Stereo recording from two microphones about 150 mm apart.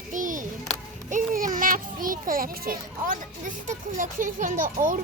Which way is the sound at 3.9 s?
60° right (ahead or behind).